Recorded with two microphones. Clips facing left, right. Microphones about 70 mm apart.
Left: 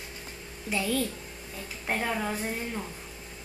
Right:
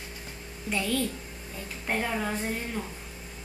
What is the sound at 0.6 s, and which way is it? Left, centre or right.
A woman's voice, centre.